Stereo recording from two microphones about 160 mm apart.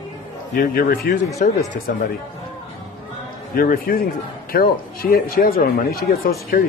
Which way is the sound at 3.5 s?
65° left (ahead or behind).